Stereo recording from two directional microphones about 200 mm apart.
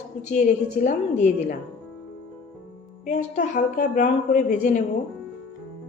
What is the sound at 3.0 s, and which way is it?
A woman's voice, 40° left (ahead or behind).